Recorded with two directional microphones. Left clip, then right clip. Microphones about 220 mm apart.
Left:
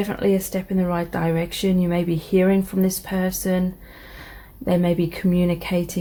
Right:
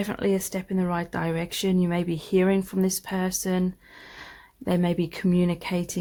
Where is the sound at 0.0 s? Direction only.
45° right (ahead or behind).